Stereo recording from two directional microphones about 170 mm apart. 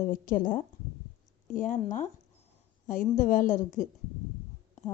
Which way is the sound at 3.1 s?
50° left (ahead or behind).